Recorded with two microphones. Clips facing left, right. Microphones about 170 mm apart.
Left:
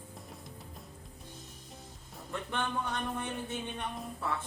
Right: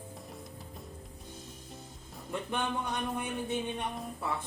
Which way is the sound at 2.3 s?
15° right (ahead or behind).